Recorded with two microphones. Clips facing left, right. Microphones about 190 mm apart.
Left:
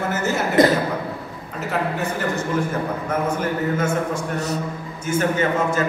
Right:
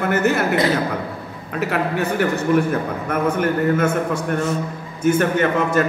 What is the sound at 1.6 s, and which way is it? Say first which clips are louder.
A man's voice: right 3 dB; 65° right (ahead or behind).